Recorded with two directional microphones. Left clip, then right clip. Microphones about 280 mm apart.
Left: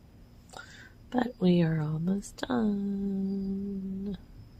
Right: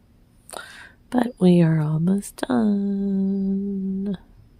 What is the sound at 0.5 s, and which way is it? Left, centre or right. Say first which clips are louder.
Speech: right 10 dB; right.